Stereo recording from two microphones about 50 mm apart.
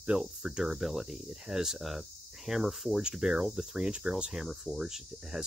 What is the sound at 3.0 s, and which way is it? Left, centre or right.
Speech, centre.